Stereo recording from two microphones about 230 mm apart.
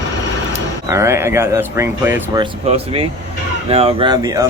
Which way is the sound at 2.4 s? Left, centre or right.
Right.